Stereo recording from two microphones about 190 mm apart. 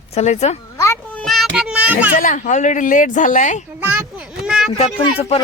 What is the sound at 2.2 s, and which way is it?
Speech, 45° left (ahead or behind).